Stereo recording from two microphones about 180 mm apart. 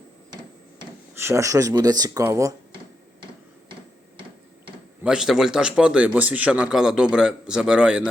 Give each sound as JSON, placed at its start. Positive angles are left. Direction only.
{"t": 1.1, "sound": "speech", "side_deg": -15}
{"t": 5.0, "sound": "a man's voice", "side_deg": -5}